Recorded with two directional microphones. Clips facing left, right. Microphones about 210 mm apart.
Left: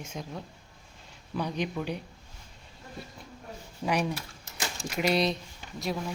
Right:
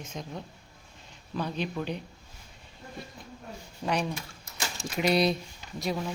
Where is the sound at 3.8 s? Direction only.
5° left (ahead or behind).